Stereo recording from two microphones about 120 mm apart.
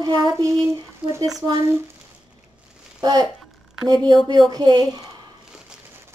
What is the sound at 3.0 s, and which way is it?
Speech, 35° right (ahead or behind).